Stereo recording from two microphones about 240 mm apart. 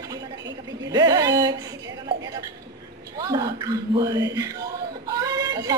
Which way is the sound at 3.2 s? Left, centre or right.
Centre.